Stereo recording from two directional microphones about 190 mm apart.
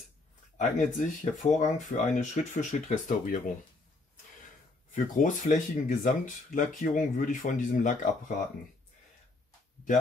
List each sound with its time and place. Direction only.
0.6 s speech: 40° left (ahead or behind)
4.9 s speech: 45° left (ahead or behind)